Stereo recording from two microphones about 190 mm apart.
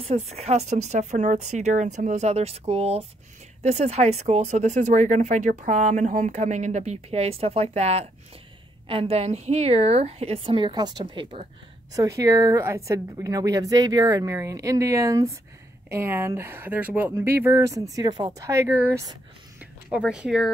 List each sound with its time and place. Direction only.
0.0 s speech: 35° right (ahead or behind); by 20.5 s centre (ahead or behind)